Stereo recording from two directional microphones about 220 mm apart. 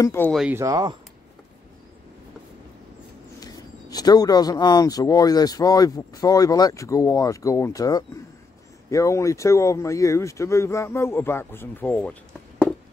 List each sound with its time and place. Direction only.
0.0 s a man's voice: 10° left (ahead or behind)
0.4 s speech: 10° right (ahead or behind)
3.3 s a man's voice: 15° left (ahead or behind)